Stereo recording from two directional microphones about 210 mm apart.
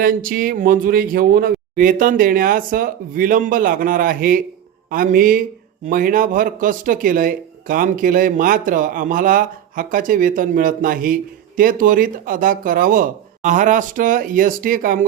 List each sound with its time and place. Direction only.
0.0 s speech: 40° right (ahead or behind)